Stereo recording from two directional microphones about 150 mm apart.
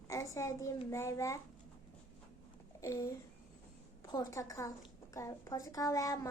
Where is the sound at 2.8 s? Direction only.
20° left (ahead or behind).